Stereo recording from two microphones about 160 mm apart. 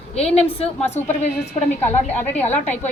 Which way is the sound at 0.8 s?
15° left (ahead or behind).